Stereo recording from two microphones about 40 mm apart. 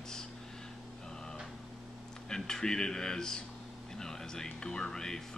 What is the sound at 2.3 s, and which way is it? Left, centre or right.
Speech, centre.